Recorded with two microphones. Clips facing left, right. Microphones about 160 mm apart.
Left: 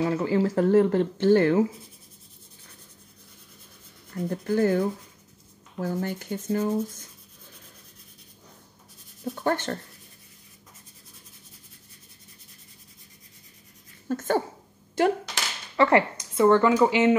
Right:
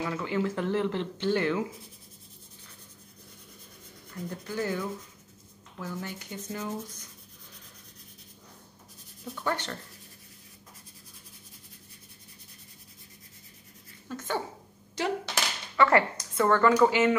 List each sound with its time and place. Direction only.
0.0 s speech: 35° left (ahead or behind)
4.3 s speech: 50° left (ahead or behind)
9.2 s speech: 45° left (ahead or behind)
14.0 s speech: 45° left (ahead or behind)
15.7 s speech: 25° left (ahead or behind)